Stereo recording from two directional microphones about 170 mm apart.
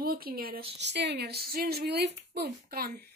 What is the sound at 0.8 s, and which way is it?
A woman's voice, 85° right.